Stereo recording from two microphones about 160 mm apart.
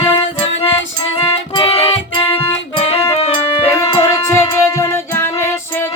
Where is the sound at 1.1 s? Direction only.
35° left (ahead or behind).